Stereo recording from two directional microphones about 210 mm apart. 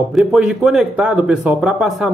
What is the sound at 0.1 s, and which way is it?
Speech, centre (ahead or behind).